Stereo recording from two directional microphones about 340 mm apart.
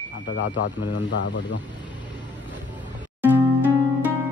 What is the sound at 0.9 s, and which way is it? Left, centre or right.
Speech, left.